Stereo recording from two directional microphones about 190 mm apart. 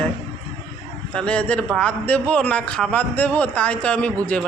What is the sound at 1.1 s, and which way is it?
A man's voice, 5° left (ahead or behind).